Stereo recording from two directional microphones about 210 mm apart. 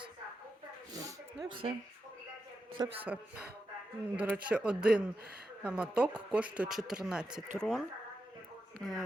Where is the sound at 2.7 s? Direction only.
20° right (ahead or behind).